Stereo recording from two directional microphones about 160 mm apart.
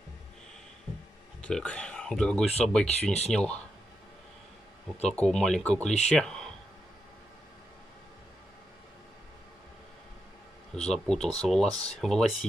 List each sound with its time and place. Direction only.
1.4 s speech: 5° left (ahead or behind)
3.0 s speech: 40° left (ahead or behind)
3.3 s speech: 5° left (ahead or behind)
5.1 s speech: 5° left (ahead or behind)
10.9 s speech: 5° left (ahead or behind)